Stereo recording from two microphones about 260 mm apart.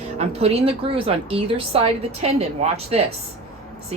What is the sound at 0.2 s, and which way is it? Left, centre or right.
A woman's voice, right.